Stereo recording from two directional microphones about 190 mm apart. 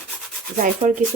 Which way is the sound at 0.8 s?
30° right (ahead or behind).